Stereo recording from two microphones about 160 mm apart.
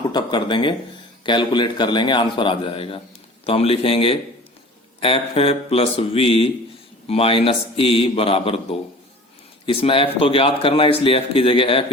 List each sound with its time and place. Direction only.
0.0 s a man's voice: 25° left (ahead or behind)